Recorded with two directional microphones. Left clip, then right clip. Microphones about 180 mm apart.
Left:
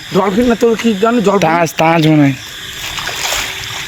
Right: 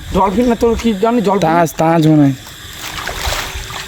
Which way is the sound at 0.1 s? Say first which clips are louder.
Left 1 dB; 55° left (ahead or behind).